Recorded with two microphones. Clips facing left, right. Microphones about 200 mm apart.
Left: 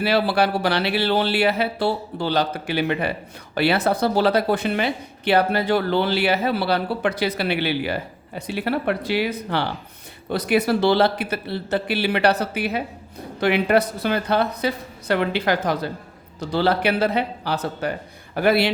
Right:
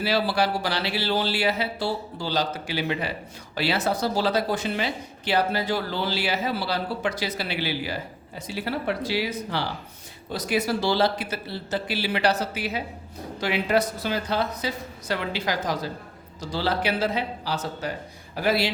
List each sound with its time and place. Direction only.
0.0 s speech: 60° left (ahead or behind)